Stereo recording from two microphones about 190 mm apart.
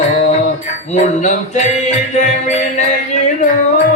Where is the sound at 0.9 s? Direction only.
40° left (ahead or behind).